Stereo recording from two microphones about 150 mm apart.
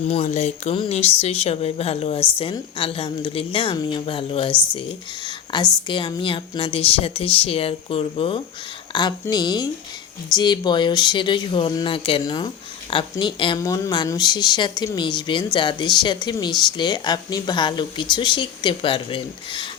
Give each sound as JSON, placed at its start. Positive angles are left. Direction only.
{"t": 0.1, "sound": "a woman's voice", "side_deg": 50}
{"t": 13.6, "sound": "speech", "side_deg": 20}